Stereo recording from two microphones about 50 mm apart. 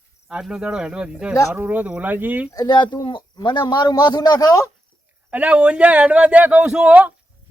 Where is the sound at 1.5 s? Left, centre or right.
Right.